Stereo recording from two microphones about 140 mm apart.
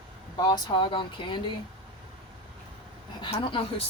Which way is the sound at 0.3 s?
30° left (ahead or behind).